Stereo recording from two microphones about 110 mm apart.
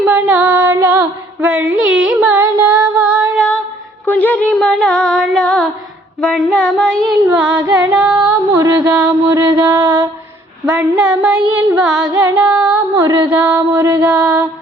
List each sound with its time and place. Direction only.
0.0 s female singing: 15° right (ahead or behind)
2.3 s music: 20° right (ahead or behind)
3.3 s female singing: 10° left (ahead or behind)
4.0 s music: 15° left (ahead or behind)
6.1 s a sound: 10° left (ahead or behind)
6.4 s child singing: 5° left (ahead or behind)
7.3 s female singing: 10° right (ahead or behind)
8.7 s mantra: 15° right (ahead or behind)
10.7 s child singing: 10° right (ahead or behind)
12.2 s music: 15° right (ahead or behind)
12.9 s mantra: 30° right (ahead or behind)
13.2 s a sound: 15° right (ahead or behind)
14.0 s mantra: 10° right (ahead or behind)